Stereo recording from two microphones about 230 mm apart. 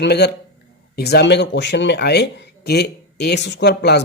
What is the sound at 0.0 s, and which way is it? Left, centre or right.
Speech, left.